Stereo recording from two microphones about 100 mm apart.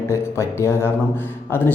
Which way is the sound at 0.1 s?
25° left (ahead or behind).